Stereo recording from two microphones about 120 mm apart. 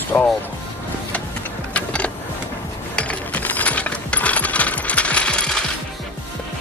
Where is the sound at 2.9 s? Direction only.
10° left (ahead or behind).